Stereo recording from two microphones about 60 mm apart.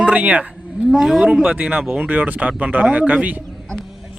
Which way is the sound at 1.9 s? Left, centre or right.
Right.